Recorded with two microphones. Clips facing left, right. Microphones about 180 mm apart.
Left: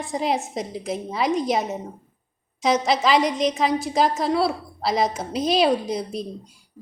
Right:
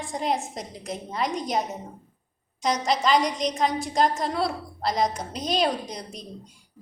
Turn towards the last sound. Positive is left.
turn(degrees=5)  # may be behind; listen again after turning